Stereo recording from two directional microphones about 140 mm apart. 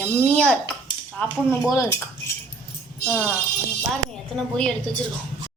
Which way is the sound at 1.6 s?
20° left (ahead or behind).